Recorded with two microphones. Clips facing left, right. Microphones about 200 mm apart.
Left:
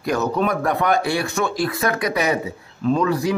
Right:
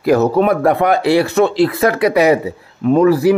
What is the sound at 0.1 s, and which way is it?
Speech, 60° right (ahead or behind).